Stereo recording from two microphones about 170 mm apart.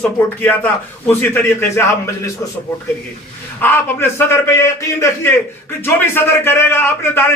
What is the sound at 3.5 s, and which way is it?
A man's voice, 10° left (ahead or behind).